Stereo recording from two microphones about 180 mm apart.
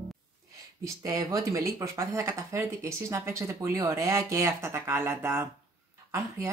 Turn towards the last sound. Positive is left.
turn(degrees=-10)  # may be behind; listen again after turning